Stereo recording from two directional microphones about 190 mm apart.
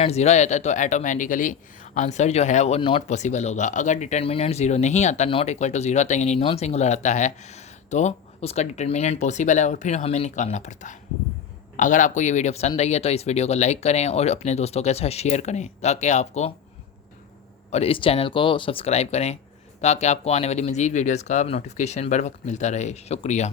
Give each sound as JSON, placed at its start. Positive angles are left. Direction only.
{"t": 0.0, "sound": "speech", "side_deg": 35}
{"t": 17.7, "sound": "speech", "side_deg": 35}